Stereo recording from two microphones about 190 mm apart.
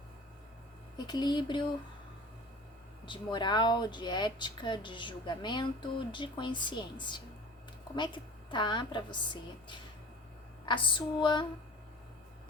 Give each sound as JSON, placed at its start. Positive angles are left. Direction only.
{"t": 0.9, "sound": "speech", "side_deg": 20}
{"t": 3.1, "sound": "speech", "side_deg": 25}